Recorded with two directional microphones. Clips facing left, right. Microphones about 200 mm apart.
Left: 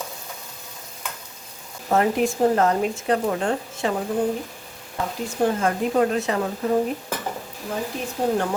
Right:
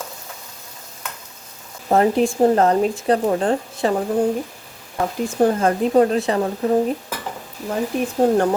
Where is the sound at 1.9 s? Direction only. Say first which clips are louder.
Right 4 dB; 30° right (ahead or behind).